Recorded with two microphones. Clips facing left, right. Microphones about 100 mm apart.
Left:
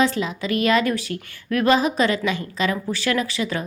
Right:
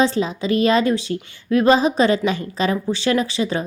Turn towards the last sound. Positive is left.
turn(degrees=-30)  # may be behind; listen again after turning